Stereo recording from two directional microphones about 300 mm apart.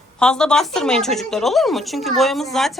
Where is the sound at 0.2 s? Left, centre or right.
Centre.